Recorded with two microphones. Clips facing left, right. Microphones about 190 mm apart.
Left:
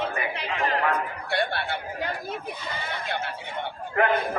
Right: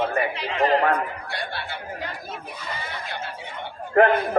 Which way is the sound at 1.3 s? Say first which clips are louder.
Left 5 dB; 60° left (ahead or behind).